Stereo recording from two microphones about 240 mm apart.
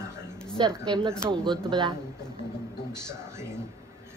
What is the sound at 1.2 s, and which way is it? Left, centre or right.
Speech, centre.